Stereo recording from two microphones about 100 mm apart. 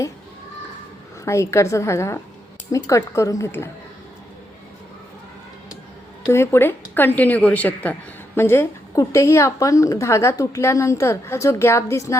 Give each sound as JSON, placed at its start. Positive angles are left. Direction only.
{"t": 1.2, "sound": "a woman's voice", "side_deg": 30}
{"t": 6.2, "sound": "a woman's voice", "side_deg": 25}